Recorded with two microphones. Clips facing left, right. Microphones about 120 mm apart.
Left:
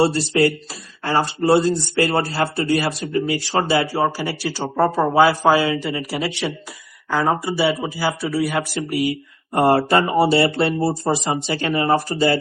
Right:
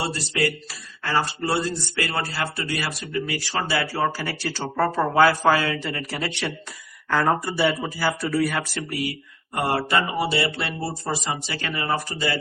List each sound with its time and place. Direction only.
0.0 s a man's voice: 30° left (ahead or behind); by 6.1 s 15° left (ahead or behind)
6.1 s speech: centre (ahead or behind)
8.8 s speech: 20° left (ahead or behind)
9.5 s speech: 35° left (ahead or behind)